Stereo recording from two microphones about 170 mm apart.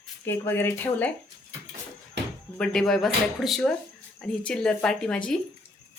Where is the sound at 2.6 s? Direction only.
5° left (ahead or behind).